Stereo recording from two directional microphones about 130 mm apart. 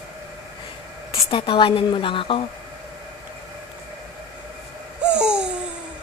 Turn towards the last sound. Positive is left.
turn(degrees=-5)  # may be behind; listen again after turning